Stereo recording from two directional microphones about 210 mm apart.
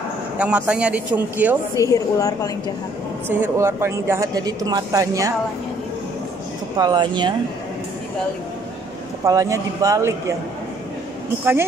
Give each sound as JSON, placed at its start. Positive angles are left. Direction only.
{"t": 0.4, "sound": "speech", "side_deg": -5}
{"t": 1.8, "sound": "a woman's voice", "side_deg": 15}
{"t": 3.3, "sound": "speech", "side_deg": -10}
{"t": 6.8, "sound": "speech", "side_deg": -20}
{"t": 9.2, "sound": "speech", "side_deg": -15}